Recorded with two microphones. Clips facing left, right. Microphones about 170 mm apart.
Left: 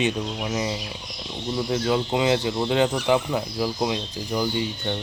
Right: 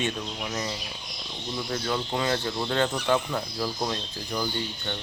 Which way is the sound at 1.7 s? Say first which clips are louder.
Left 6 dB; 15° left (ahead or behind).